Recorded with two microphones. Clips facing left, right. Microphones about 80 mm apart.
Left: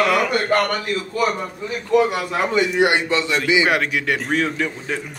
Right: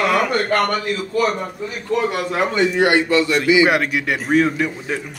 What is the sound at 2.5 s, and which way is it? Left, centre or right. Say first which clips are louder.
Speech: right 2 dB; centre.